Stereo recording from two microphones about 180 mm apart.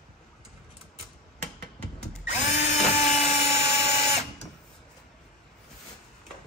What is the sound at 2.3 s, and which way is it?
Drill, 40° left (ahead or behind).